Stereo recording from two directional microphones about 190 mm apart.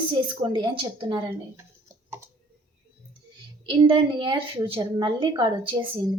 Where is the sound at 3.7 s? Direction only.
25° right (ahead or behind).